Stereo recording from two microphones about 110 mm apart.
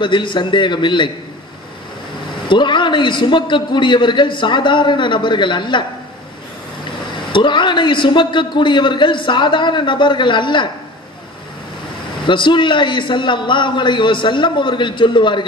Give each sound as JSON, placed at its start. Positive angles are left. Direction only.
{"t": 0.0, "sound": "a man's voice", "side_deg": 45}
{"t": 2.4, "sound": "a man's voice", "side_deg": 45}
{"t": 7.1, "sound": "a man's voice", "side_deg": 45}
{"t": 12.3, "sound": "a man's voice", "side_deg": 45}